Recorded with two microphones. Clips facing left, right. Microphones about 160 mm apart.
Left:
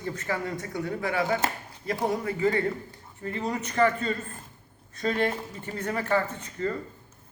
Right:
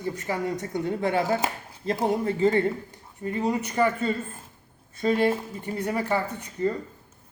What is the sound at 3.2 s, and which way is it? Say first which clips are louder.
Speech: right 4 dB; 15° right (ahead or behind).